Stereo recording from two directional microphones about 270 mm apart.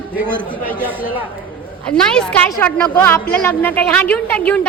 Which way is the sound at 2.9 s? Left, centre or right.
Centre.